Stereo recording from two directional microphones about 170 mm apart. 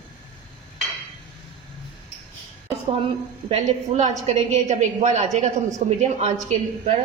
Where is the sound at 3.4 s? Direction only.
45° right (ahead or behind).